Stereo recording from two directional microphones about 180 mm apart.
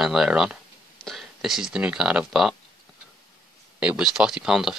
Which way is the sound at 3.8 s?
5° right (ahead or behind).